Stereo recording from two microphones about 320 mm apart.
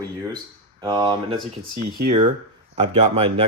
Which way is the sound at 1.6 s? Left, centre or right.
Right.